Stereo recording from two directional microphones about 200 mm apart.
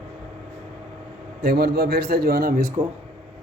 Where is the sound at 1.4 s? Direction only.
55° right (ahead or behind).